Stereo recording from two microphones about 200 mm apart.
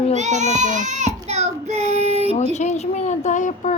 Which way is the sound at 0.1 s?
35° right (ahead or behind).